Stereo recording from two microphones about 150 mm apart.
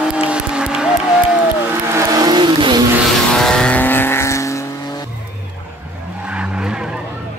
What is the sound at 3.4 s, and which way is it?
Vehicle, 5° left (ahead or behind).